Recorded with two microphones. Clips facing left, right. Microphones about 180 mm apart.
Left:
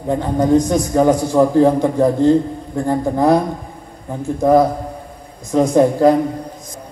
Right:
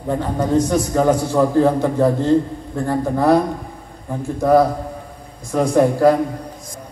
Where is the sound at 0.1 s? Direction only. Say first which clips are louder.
Left 4 dB; 15° left (ahead or behind).